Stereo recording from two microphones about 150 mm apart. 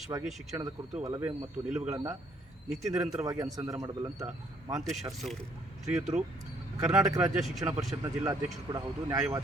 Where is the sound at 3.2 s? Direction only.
25° right (ahead or behind).